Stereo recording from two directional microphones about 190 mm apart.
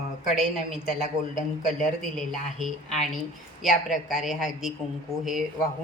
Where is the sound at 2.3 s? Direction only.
Centre (ahead or behind).